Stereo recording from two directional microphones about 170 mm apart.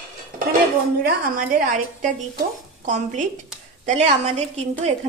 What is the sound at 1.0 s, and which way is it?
Speech, 55° right (ahead or behind).